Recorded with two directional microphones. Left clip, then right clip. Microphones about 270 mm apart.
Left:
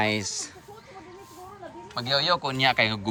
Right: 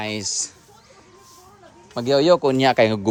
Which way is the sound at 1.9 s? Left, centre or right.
Right.